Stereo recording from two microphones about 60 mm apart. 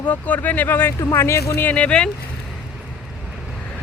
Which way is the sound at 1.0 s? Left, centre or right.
Left.